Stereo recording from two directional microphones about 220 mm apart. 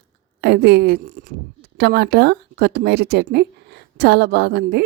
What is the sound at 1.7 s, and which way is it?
Speech, 45° right (ahead or behind).